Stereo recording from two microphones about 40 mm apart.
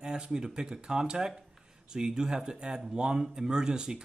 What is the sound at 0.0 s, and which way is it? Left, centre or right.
Speech, right.